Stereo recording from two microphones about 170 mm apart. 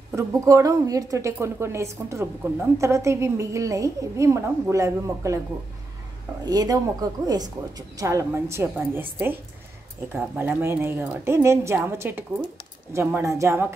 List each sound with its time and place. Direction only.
0.1 s a woman's voice: 20° right (ahead or behind)
6.4 s a woman's voice: 25° right (ahead or behind)
10.1 s a woman's voice: 10° right (ahead or behind)